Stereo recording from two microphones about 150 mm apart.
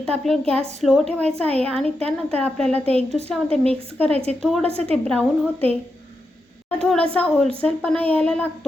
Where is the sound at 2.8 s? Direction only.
40° right (ahead or behind).